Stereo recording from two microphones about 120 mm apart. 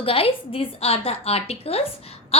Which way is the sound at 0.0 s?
50° left (ahead or behind).